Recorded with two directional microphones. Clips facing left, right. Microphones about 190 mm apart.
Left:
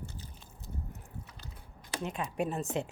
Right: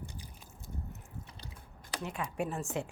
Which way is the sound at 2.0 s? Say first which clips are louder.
Left 2 dB; 20° left (ahead or behind).